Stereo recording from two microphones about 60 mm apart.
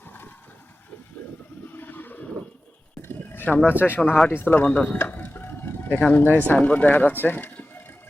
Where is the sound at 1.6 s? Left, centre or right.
Left.